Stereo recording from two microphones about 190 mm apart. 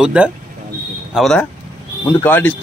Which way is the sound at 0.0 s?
5° right (ahead or behind).